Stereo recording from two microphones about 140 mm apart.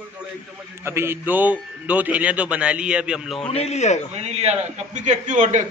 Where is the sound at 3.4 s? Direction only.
45° left (ahead or behind).